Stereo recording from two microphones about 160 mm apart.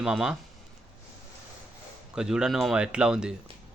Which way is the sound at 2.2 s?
5° right (ahead or behind).